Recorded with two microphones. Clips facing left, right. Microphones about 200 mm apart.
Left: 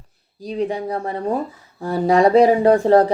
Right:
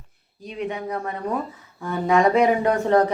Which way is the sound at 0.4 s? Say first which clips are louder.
Left 6 dB; 35° left (ahead or behind).